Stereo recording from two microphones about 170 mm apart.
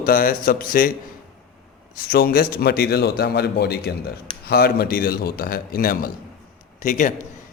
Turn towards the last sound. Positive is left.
turn(degrees=50)  # may be behind; listen again after turning